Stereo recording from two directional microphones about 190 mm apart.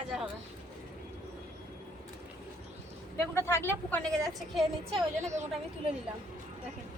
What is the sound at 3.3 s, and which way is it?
A woman's voice, 15° left (ahead or behind).